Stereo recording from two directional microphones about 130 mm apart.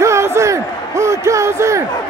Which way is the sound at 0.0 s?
20° right (ahead or behind).